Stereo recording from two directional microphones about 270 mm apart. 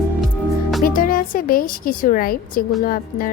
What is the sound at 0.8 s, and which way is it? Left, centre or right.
Speech, left.